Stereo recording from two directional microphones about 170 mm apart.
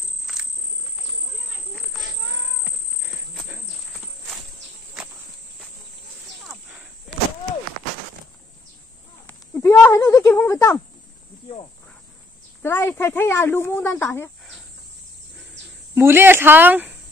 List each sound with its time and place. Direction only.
0.3 s cricket: centre (ahead or behind)
9.5 s a sound: 15° left (ahead or behind)
12.6 s a woman's voice: 15° left (ahead or behind)
15.9 s speech: 15° right (ahead or behind)